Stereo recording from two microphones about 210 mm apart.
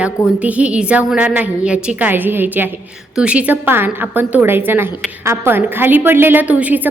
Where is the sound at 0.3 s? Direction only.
5° right (ahead or behind).